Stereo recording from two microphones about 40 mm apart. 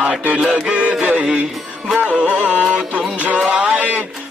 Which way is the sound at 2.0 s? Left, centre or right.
Right.